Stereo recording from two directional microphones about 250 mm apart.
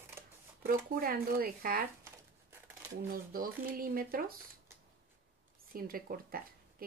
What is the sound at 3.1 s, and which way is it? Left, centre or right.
Speech, right.